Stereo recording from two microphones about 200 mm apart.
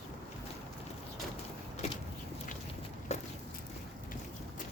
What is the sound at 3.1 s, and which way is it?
Walk, 35° left (ahead or behind).